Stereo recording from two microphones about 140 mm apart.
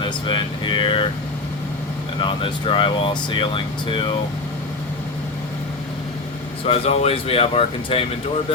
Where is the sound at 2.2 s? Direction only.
35° left (ahead or behind).